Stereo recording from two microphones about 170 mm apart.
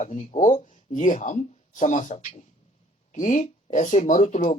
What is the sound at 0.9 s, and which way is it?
Speech, 45° left (ahead or behind).